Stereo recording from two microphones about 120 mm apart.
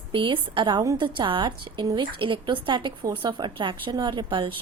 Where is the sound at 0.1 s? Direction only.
45° right (ahead or behind).